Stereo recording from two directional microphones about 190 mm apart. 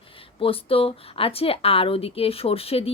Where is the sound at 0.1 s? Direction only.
30° left (ahead or behind).